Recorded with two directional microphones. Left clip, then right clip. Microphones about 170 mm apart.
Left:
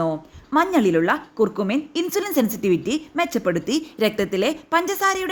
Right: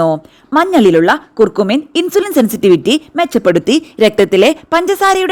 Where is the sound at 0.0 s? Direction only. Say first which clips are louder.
Right 11 dB; 45° right (ahead or behind).